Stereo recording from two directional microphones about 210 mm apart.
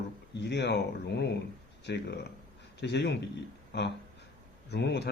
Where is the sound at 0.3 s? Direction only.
55° left (ahead or behind).